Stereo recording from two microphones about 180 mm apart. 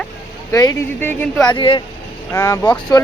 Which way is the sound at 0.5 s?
20° left (ahead or behind).